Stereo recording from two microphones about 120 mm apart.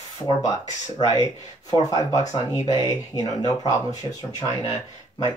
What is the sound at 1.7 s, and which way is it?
Speech, 30° left (ahead or behind).